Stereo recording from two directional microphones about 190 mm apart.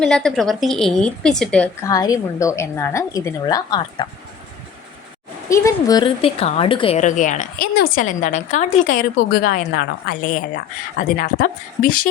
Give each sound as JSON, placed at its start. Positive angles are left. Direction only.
{"t": 0.0, "sound": "a woman's voice", "side_deg": 5}
{"t": 1.9, "sound": "a woman's voice", "side_deg": 20}
{"t": 5.5, "sound": "a woman's voice", "side_deg": 15}